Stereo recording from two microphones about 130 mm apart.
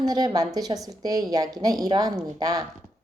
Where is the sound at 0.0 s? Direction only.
30° right (ahead or behind).